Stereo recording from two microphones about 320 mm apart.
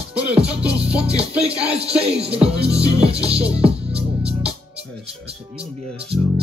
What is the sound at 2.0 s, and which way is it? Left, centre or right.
Music, centre.